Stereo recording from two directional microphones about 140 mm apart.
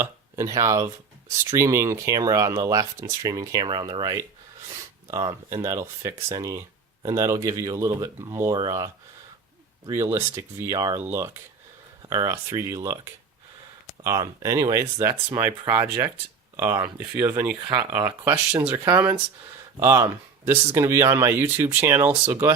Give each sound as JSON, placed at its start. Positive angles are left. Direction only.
{"t": 0.0, "sound": "speech", "side_deg": -25}
{"t": 5.3, "sound": "speech", "side_deg": -20}
{"t": 9.9, "sound": "speech", "side_deg": -20}
{"t": 14.0, "sound": "speech", "side_deg": -25}
{"t": 17.6, "sound": "speech", "side_deg": -30}
{"t": 17.9, "sound": "speech", "side_deg": -15}